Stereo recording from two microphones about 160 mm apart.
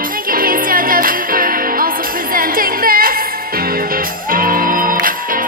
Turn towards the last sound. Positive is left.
turn(degrees=-60)  # may be behind; listen again after turning